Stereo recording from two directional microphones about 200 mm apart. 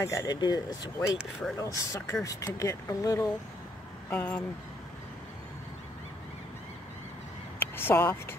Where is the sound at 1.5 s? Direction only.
15° left (ahead or behind).